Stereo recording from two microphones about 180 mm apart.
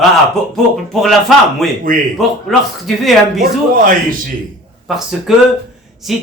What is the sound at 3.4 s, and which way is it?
Speech, 50° right (ahead or behind).